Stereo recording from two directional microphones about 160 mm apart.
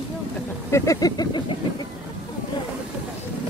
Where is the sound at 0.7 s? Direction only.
20° left (ahead or behind).